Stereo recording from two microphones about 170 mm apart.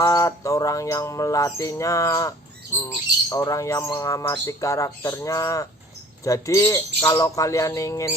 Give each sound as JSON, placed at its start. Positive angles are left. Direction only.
{"t": 0.0, "sound": "speech", "side_deg": 20}